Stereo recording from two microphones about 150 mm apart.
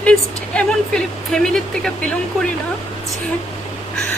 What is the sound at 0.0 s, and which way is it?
Speech, 5° left (ahead or behind).